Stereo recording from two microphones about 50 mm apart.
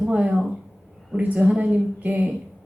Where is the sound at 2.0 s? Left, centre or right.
Right.